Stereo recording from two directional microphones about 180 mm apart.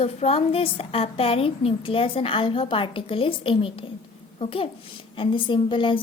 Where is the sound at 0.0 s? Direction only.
35° left (ahead or behind).